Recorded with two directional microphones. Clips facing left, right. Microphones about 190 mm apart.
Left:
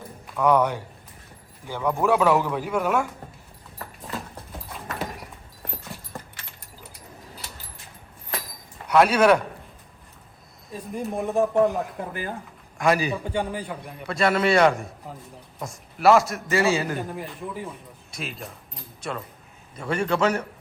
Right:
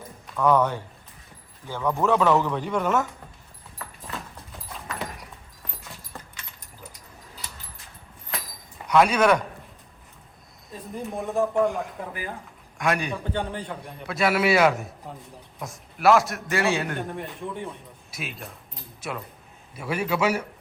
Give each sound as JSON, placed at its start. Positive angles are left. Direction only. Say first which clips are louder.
{"t": 0.3, "sound": "speech", "louder": "left 1 dB", "side_deg": 10}
{"t": 3.8, "sound": "horse", "louder": "left 3 dB", "side_deg": 35}
{"t": 4.7, "sound": "a sound", "louder": "left 2 dB", "side_deg": 0}
{"t": 8.9, "sound": "a man's voice", "louder": "left 2 dB", "side_deg": 5}
{"t": 11.1, "sound": "a man's voice", "louder": "left 2 dB", "side_deg": 0}